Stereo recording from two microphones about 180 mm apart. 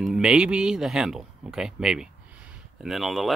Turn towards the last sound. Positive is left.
turn(degrees=0)  # may be behind; listen again after turning